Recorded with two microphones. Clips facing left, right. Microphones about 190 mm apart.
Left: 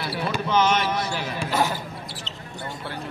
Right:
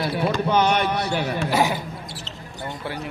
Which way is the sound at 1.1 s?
60° right (ahead or behind).